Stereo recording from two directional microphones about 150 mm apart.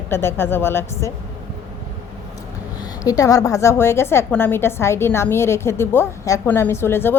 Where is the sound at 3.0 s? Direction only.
25° left (ahead or behind).